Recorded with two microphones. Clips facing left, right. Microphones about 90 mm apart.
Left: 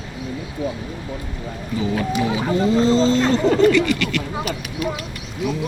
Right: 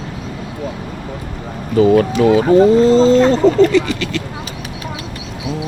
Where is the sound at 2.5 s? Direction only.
40° right (ahead or behind).